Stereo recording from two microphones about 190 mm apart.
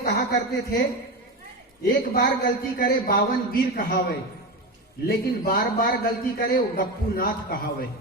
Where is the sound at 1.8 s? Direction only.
50° left (ahead or behind).